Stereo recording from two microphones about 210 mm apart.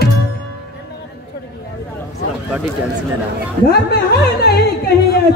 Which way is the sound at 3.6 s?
50° left (ahead or behind).